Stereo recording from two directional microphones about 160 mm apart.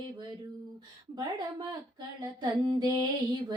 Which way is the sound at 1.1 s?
25° right (ahead or behind).